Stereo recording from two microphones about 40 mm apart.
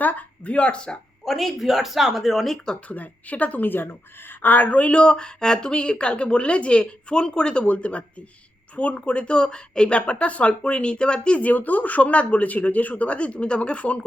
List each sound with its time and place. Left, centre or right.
0.0 s a sound: left
1.2 s speech: centre
2.9 s speech: left
4.3 s speech: left
7.6 s speech: left
11.3 s speech: left